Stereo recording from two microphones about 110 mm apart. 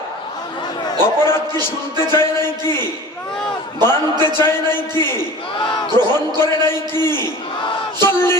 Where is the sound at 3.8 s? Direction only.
20° left (ahead or behind).